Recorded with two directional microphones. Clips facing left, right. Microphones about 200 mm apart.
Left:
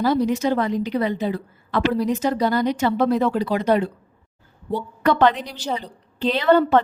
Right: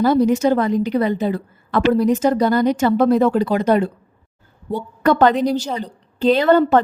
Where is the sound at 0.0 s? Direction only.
50° right (ahead or behind).